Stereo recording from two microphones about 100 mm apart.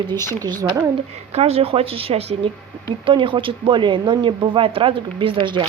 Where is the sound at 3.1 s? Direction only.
55° right (ahead or behind).